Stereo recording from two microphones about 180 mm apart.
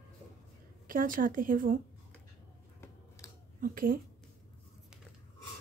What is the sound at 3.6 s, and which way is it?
Speech, 50° right (ahead or behind).